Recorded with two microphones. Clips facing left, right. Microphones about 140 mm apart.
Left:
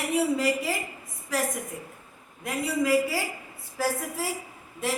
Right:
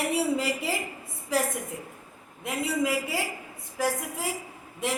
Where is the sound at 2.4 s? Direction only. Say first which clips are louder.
Even; 20° right (ahead or behind).